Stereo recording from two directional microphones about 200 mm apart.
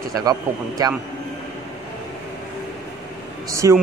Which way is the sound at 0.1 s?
20° right (ahead or behind).